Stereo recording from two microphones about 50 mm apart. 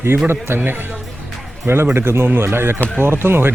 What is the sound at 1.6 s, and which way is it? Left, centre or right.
Speech, right.